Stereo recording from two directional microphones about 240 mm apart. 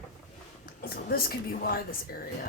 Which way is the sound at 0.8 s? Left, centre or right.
Left.